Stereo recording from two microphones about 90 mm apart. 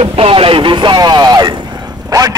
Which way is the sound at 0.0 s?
90° right.